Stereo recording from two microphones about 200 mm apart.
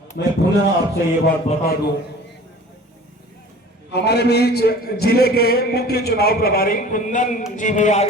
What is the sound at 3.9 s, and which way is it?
A man's voice, 55° left (ahead or behind).